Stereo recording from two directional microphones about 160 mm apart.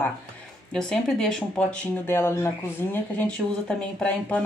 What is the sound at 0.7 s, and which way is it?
Speech, 5° left (ahead or behind).